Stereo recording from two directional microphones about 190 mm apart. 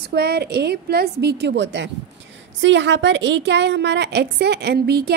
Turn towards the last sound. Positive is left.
turn(degrees=-55)  # may be behind; listen again after turning